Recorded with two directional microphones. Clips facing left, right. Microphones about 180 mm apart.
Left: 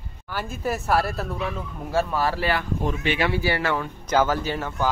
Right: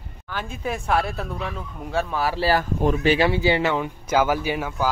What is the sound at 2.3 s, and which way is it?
Speech, 35° right (ahead or behind).